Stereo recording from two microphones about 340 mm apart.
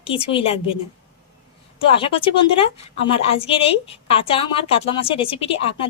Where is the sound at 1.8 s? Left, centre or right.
Centre.